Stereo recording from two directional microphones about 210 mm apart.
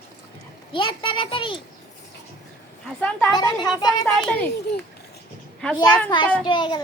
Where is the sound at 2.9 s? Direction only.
5° left (ahead or behind).